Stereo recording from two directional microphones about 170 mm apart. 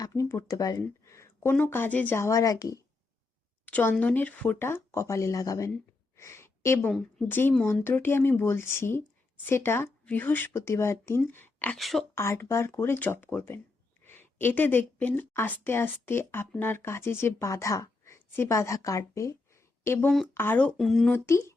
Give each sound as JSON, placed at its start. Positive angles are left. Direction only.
{"t": 0.0, "sound": "speech", "side_deg": 20}
{"t": 3.7, "sound": "a woman's voice", "side_deg": 10}
{"t": 6.1, "sound": "a sound", "side_deg": 15}
{"t": 6.9, "sound": "a woman's voice", "side_deg": 10}
{"t": 12.1, "sound": "a woman's voice", "side_deg": 15}
{"t": 21.2, "sound": "a woman's voice", "side_deg": 15}